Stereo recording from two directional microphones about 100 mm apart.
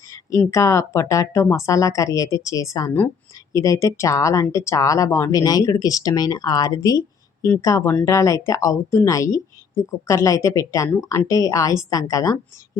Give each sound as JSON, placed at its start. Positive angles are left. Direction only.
{"t": 0.1, "sound": "speech", "side_deg": 30}